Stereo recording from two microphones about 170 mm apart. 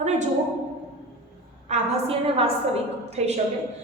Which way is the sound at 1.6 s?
40° right (ahead or behind).